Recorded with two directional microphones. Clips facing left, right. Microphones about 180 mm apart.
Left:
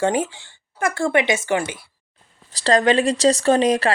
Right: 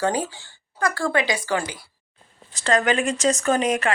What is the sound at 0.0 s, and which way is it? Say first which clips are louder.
Speech: left 3 dB; 25° left (ahead or behind).